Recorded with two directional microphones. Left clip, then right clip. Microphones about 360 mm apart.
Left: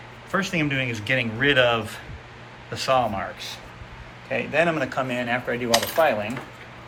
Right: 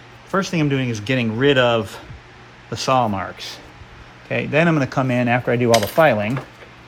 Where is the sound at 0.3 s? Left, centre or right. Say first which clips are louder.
Right 4 dB; centre.